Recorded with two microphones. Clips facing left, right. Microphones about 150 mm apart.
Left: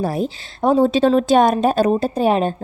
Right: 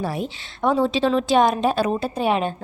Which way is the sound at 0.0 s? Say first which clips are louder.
Left 5 dB; 40° left (ahead or behind).